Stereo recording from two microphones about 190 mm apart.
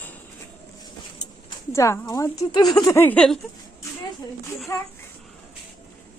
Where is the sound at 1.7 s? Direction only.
15° left (ahead or behind).